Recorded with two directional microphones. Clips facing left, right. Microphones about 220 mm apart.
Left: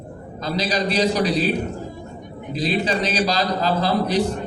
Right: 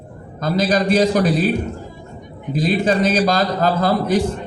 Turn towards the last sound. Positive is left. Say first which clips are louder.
# right 3 dB
turn(degrees=-50)  # may be behind; listen again after turning